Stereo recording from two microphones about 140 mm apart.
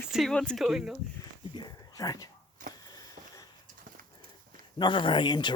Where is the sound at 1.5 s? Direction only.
30° left (ahead or behind).